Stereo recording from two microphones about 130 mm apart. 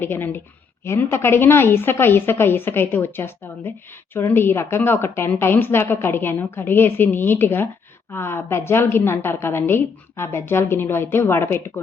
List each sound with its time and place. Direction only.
0.0 s a woman's voice: 15° left (ahead or behind)